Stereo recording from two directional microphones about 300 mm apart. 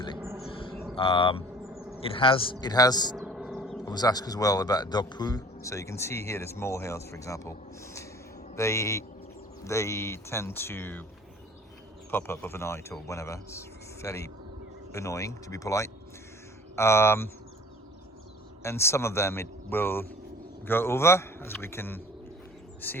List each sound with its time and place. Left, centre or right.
0.7 s mantra: centre
0.9 s speech: centre
3.2 s a sound: centre
3.8 s speech: centre
12.1 s speech: centre
18.6 s speech: centre